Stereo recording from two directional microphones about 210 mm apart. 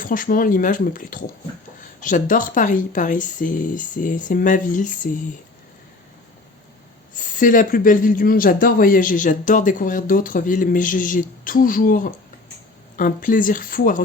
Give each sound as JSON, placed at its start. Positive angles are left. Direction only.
{"t": 0.0, "sound": "a man's voice", "side_deg": 40}
{"t": 7.3, "sound": "a man's voice", "side_deg": 40}